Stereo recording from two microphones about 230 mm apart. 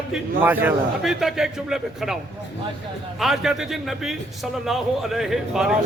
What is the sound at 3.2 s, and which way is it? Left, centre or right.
A man's voice, centre.